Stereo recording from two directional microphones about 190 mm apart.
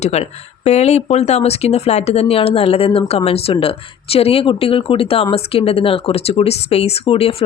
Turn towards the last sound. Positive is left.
turn(degrees=30)  # may be behind; listen again after turning